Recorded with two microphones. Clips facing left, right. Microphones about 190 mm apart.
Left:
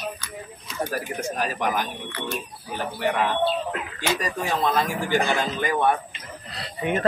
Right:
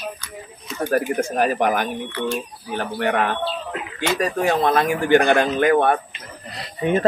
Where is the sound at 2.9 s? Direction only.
60° right (ahead or behind).